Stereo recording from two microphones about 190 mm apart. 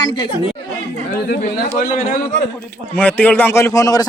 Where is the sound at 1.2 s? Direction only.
50° left (ahead or behind).